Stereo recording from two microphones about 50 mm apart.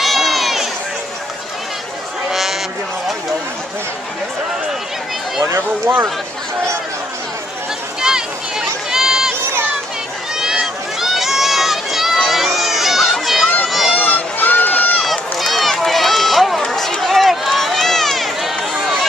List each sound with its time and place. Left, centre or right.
0.0 s a sound: centre
5.6 s speech: right
8.0 s run: centre
11.0 s run: centre
12.3 s crowd: centre
13.7 s a sound: centre
13.9 s a sound: left
14.7 s run: left
15.0 s run: centre